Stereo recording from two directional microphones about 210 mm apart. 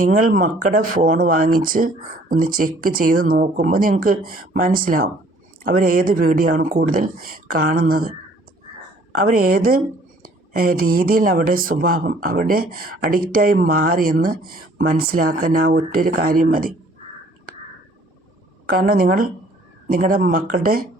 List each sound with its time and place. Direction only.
0.0 s speech: 40° right (ahead or behind)
9.1 s speech: 45° right (ahead or behind)
18.7 s speech: 40° right (ahead or behind)